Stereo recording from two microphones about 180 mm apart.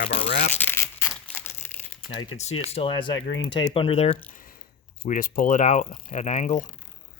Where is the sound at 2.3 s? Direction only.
35° left (ahead or behind).